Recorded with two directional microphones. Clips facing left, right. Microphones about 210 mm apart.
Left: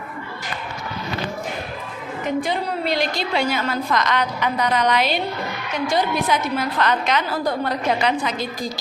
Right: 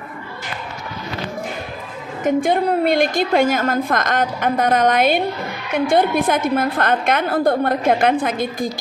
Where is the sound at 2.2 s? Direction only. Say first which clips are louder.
Right 7 dB; 50° right (ahead or behind).